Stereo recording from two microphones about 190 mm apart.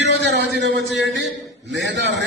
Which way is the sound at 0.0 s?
65° right (ahead or behind).